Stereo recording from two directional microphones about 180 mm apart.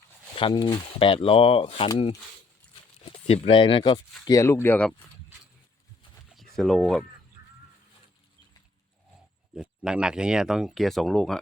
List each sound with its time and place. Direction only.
0.3 s speech: 25° left (ahead or behind)
3.2 s speech: 35° left (ahead or behind); by 4.9 s 10° left (ahead or behind)
6.3 s a sound: centre (ahead or behind)
9.6 s speech: 5° right (ahead or behind)